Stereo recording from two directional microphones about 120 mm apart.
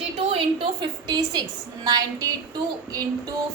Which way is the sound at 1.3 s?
35° right (ahead or behind).